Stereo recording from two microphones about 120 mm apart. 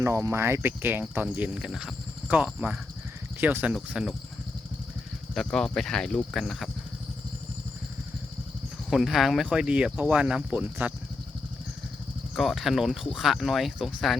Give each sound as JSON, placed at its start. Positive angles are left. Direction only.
{"t": 0.0, "sound": "speech", "side_deg": -20}
{"t": 5.3, "sound": "speech", "side_deg": 5}
{"t": 8.9, "sound": "speech", "side_deg": 0}
{"t": 12.3, "sound": "speech", "side_deg": 0}